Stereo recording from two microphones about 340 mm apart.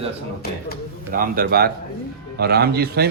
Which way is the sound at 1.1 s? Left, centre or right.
Right.